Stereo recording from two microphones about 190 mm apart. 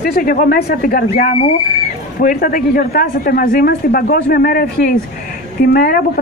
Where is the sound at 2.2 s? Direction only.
45° left (ahead or behind).